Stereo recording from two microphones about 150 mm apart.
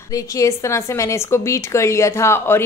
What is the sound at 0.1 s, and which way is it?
A woman's voice, 20° left (ahead or behind).